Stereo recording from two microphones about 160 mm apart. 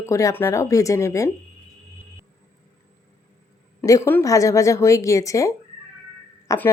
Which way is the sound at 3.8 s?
15° left (ahead or behind).